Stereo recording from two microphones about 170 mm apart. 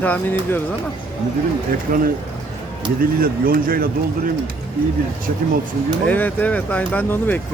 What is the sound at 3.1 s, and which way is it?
Speech, 60° right (ahead or behind).